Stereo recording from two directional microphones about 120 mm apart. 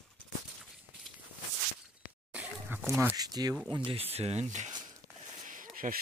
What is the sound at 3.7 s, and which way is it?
Speech, 50° right (ahead or behind).